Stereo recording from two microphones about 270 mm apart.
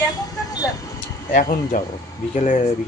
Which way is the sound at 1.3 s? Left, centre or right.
Left.